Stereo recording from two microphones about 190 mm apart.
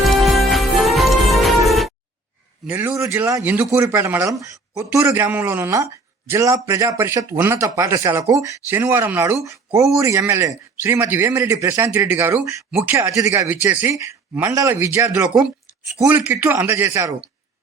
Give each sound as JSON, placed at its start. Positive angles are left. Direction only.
{"t": 0.0, "sound": "music", "side_deg": 0}
{"t": 2.6, "sound": "speech", "side_deg": -10}